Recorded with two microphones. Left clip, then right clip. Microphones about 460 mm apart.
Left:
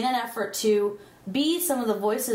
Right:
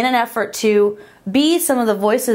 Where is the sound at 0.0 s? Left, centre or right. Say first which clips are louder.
Right 9 dB; right.